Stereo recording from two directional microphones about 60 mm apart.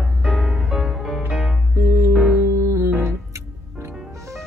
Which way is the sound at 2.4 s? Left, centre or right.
Right.